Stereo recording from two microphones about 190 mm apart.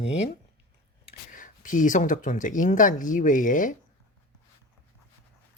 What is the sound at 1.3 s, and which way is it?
Speech, 45° left (ahead or behind).